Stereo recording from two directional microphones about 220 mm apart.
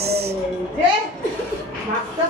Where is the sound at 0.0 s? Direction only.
45° right (ahead or behind).